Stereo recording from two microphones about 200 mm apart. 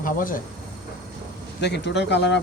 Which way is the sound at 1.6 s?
60° left (ahead or behind).